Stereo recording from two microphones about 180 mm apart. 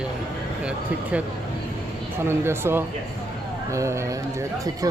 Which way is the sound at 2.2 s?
15° right (ahead or behind).